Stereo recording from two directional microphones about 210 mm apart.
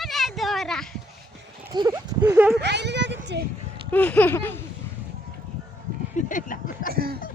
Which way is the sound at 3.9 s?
5° left (ahead or behind).